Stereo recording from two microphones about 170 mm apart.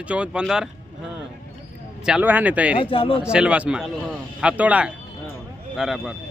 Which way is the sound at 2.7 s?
30° left (ahead or behind).